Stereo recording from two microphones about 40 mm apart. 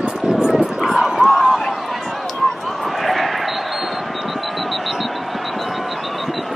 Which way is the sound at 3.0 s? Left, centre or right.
Centre.